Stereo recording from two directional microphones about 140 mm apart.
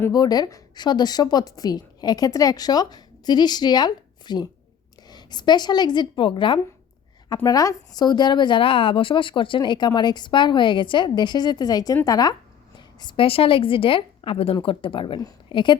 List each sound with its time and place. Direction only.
0.1 s speech: 30° left (ahead or behind)
7.4 s speech: 25° left (ahead or behind)